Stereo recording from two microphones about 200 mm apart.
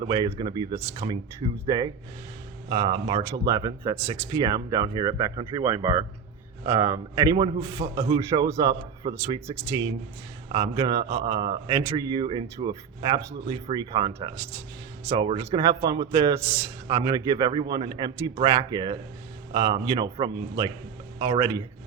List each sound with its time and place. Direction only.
0.1 s a man's voice: 20° right (ahead or behind)